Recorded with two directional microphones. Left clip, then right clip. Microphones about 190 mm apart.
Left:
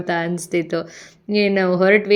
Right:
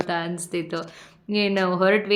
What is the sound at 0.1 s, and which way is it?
Speech, 25° left (ahead or behind).